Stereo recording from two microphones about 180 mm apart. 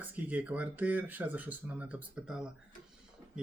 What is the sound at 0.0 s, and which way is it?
Speech, 10° right (ahead or behind).